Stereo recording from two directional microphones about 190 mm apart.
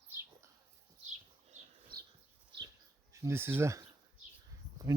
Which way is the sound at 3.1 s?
15° right (ahead or behind).